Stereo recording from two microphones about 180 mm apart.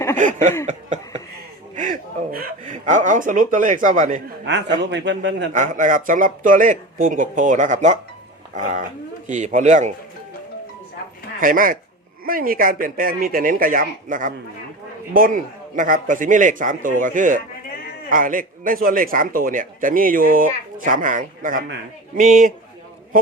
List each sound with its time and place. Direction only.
0.2 s a man's voice: 45° right (ahead or behind)
1.7 s a man's voice: 45° right (ahead or behind)
4.8 s a man's voice: 80° right
5.5 s a man's voice: 45° right (ahead or behind)
11.3 s a man's voice: 50° right (ahead or behind)